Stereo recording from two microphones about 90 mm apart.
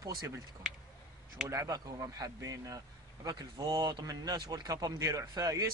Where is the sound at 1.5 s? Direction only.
35° right (ahead or behind).